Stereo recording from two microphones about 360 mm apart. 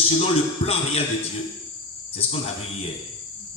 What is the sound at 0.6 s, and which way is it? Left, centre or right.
Speech, centre.